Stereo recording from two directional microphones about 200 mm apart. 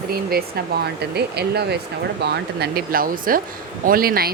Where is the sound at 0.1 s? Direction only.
50° right (ahead or behind).